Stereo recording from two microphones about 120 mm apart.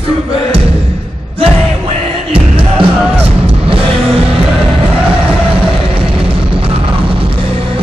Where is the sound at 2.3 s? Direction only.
50° right (ahead or behind).